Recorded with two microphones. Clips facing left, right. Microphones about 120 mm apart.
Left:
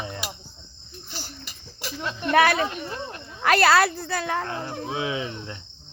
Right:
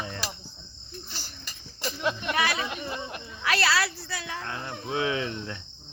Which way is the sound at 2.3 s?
55° left (ahead or behind).